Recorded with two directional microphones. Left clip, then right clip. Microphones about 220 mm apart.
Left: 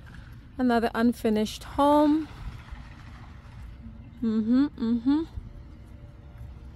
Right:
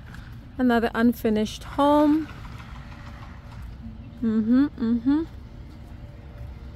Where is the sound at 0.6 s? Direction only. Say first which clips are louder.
Right 2 dB; 15° left (ahead or behind).